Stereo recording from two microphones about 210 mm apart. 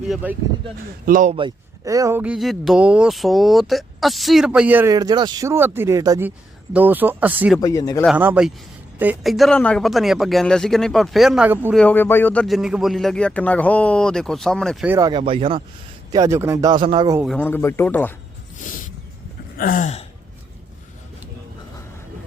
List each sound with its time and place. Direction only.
0.1 s speech: 5° right (ahead or behind)
1.0 s speech: 40° right (ahead or behind)
1.4 s speech: 20° right (ahead or behind)
7.6 s speech: 15° left (ahead or behind)
8.0 s a man's voice: 10° right (ahead or behind)
11.7 s a man's voice: 5° left (ahead or behind)
14.8 s speech: 15° right (ahead or behind)
15.2 s speech: 25° right (ahead or behind)
17.3 s speech: 10° left (ahead or behind)
19.5 s gasp: 40° left (ahead or behind)